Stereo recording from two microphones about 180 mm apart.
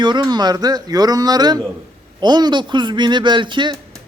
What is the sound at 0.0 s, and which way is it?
Speech, 25° right (ahead or behind).